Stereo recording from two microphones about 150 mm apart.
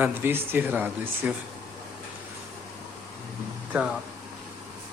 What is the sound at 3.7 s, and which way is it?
Speech, 10° right (ahead or behind).